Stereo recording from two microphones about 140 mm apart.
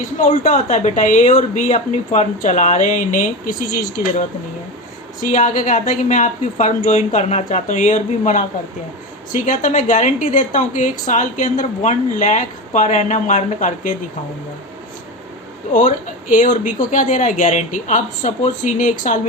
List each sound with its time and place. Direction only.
0.2 s a woman's voice: 55° left (ahead or behind)
5.2 s a woman's voice: 60° left (ahead or behind)
16.3 s a woman's voice: 65° left (ahead or behind)